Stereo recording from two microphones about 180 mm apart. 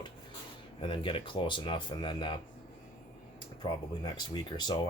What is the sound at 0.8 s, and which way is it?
Speech, 30° left (ahead or behind).